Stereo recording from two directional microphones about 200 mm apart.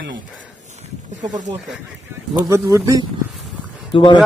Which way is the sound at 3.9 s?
25° left (ahead or behind).